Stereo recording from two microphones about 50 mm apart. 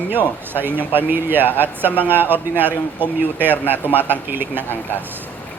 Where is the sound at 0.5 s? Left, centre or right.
Right.